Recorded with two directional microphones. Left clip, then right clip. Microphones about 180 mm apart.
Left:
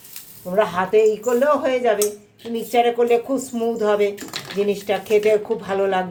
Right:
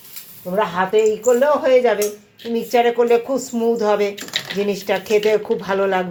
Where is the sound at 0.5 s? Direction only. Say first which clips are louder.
Even; centre (ahead or behind).